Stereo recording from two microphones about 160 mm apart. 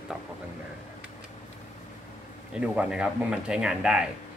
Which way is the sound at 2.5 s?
5° right (ahead or behind).